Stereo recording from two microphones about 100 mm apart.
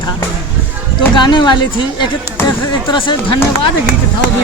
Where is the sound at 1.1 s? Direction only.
50° left (ahead or behind).